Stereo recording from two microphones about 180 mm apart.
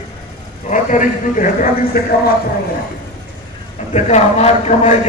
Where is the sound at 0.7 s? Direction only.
45° left (ahead or behind).